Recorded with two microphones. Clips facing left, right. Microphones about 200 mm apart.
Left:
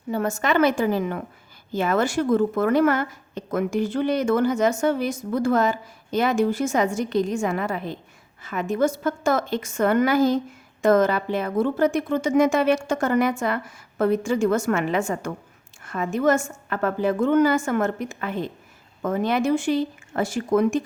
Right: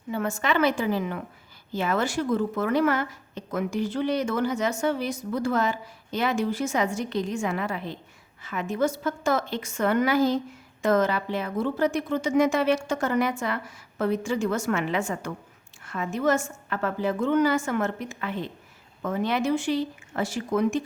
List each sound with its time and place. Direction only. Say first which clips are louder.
0.1 s a woman's voice: left 3 dB; 40° left (ahead or behind)